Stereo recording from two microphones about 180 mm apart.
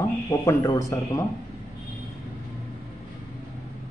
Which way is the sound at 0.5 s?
15° left (ahead or behind).